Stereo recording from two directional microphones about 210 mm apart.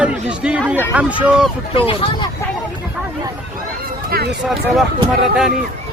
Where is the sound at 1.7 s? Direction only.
25° left (ahead or behind).